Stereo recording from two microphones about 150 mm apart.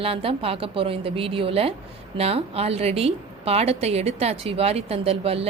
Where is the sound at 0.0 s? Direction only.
40° right (ahead or behind).